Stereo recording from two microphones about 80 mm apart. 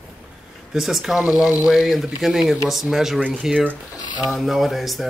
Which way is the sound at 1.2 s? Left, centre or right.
Centre.